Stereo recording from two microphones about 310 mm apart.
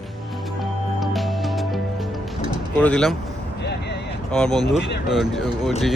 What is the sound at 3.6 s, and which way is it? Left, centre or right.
Vehicle, left.